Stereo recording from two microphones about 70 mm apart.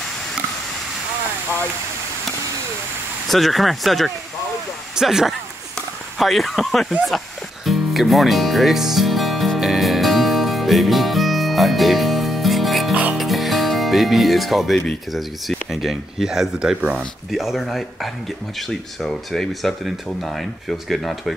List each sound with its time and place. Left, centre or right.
3.3 s speech: centre
7.6 s music: centre
12.9 s music: centre
13.2 s music: centre
15.1 s speech: centre
16.5 s speech: centre
17.3 s speech: centre